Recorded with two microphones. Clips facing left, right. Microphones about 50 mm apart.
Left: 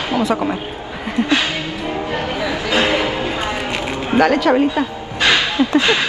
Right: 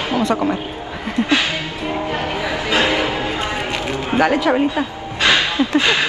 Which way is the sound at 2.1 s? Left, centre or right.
Right.